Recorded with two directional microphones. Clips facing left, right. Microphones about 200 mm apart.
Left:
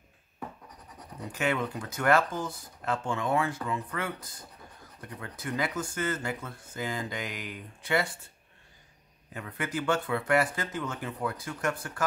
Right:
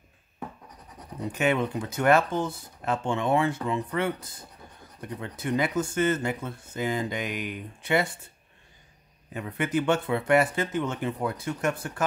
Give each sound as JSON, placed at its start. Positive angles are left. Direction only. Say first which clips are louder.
{"t": 1.3, "sound": "speech", "louder": "right 4 dB", "side_deg": -20}
{"t": 9.3, "sound": "speech", "louder": "right 7 dB", "side_deg": -20}